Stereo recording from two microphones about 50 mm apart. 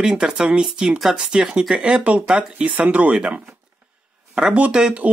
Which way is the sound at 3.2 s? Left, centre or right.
Centre.